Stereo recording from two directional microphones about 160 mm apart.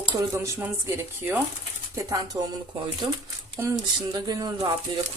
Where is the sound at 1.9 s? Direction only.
20° right (ahead or behind).